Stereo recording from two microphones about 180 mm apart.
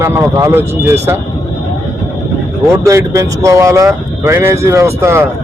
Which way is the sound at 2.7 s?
15° right (ahead or behind).